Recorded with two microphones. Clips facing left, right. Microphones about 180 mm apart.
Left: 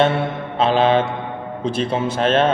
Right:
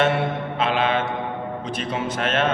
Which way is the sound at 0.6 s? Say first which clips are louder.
Left 7 dB; 30° left (ahead or behind).